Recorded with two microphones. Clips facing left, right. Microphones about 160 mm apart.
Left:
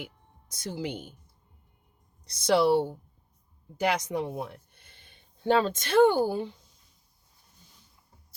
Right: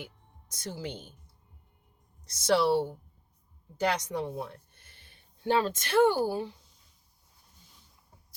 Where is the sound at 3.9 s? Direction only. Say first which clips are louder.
Left 5 dB; 10° left (ahead or behind).